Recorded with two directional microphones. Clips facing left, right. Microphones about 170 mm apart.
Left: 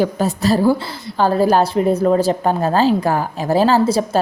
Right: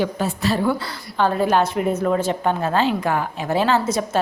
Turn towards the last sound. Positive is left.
turn(degrees=30)  # may be behind; listen again after turning